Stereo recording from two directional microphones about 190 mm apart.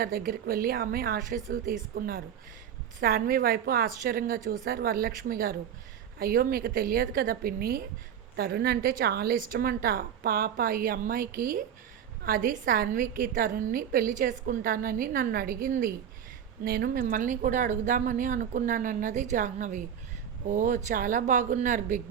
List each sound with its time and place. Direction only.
0.0 s a woman's voice: 50° right (ahead or behind)